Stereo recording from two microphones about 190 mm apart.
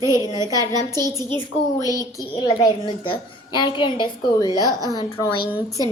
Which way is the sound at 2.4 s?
25° left (ahead or behind).